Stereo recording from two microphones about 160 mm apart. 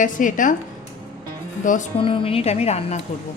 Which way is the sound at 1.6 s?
50° left (ahead or behind).